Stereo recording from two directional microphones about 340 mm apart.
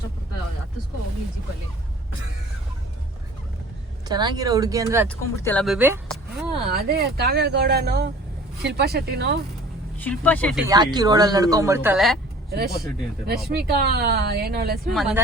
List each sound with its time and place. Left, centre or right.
4.1 s speech: centre
5.0 s speech: centre
6.7 s speech: right
10.0 s speech: centre
12.5 s speech: right
14.8 s speech: centre